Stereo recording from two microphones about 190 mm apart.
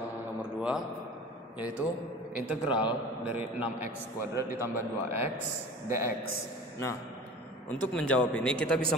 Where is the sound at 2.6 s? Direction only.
25° left (ahead or behind).